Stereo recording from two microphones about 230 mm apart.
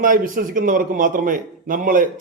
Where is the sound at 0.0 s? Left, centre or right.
Right.